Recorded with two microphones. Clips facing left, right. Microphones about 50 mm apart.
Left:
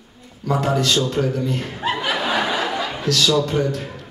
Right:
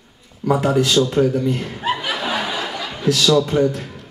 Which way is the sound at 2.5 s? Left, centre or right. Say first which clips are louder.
Left 3 dB; left.